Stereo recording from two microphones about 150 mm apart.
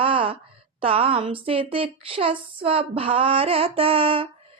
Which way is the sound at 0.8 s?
35° right (ahead or behind).